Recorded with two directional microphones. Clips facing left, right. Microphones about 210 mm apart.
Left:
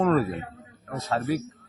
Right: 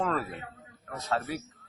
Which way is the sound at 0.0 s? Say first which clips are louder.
Left 8 dB; 30° left (ahead or behind).